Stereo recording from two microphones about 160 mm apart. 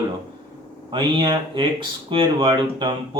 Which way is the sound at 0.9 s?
30° right (ahead or behind).